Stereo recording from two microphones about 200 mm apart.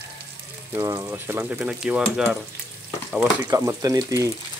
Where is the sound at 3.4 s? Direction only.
15° right (ahead or behind).